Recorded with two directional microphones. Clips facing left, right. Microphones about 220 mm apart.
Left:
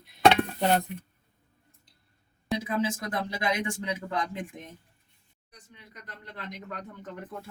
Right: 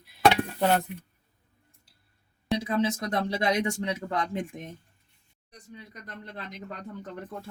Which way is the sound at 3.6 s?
30° right (ahead or behind).